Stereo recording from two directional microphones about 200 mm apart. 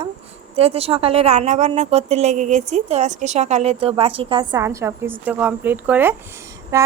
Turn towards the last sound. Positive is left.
turn(degrees=-15)  # may be behind; listen again after turning